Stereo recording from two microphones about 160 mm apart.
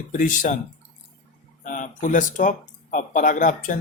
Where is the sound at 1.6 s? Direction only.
55° left (ahead or behind).